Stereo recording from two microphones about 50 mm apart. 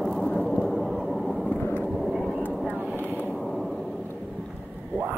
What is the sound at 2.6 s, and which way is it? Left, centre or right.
Vehicle, right.